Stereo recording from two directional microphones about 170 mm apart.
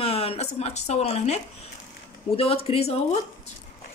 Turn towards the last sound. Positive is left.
turn(degrees=35)  # may be behind; listen again after turning